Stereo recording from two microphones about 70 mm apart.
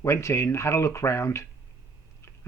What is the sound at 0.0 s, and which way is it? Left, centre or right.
Speech, left.